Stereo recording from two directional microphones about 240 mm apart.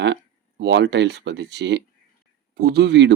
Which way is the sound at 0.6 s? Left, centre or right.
Right.